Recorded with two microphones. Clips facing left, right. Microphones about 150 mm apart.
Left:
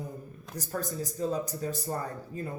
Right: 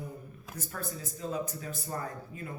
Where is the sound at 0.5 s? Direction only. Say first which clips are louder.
Left 6 dB; 35° left (ahead or behind).